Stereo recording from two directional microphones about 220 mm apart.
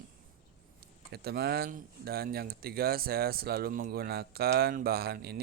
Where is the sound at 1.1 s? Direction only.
45° right (ahead or behind).